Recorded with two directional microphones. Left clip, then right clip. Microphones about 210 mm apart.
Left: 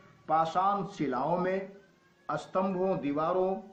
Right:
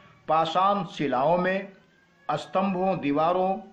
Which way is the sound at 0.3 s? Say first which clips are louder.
Right 5 dB; 45° right (ahead or behind).